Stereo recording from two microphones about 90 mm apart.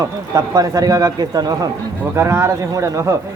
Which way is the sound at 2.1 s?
30° right (ahead or behind).